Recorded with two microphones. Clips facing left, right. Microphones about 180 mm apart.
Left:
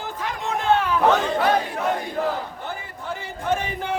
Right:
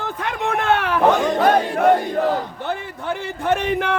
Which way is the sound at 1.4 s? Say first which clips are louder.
Right 6 dB; 55° right (ahead or behind).